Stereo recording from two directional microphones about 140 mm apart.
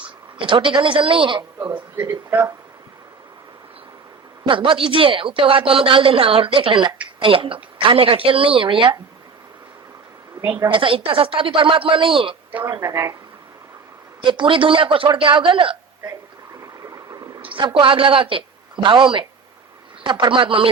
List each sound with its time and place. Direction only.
0.3 s a woman's voice: 35° right (ahead or behind)
1.7 s speech: 15° right (ahead or behind)
4.4 s a woman's voice: 35° right (ahead or behind)
10.7 s a woman's voice: 40° right (ahead or behind)
12.5 s a woman's voice: 10° right (ahead or behind)
14.2 s a woman's voice: 35° right (ahead or behind)
16.8 s vehicle: 25° right (ahead or behind)
17.4 s a woman's voice: 35° right (ahead or behind)